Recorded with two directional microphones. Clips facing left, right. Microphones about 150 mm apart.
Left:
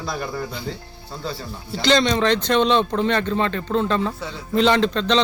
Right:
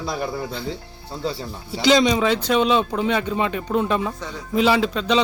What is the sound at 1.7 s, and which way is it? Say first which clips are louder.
Speech: right 2 dB; 10° right (ahead or behind).